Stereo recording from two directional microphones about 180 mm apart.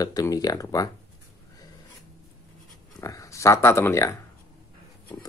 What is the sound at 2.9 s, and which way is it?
Speech, 15° left (ahead or behind).